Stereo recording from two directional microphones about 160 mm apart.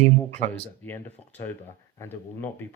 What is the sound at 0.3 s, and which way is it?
Speech, 10° left (ahead or behind).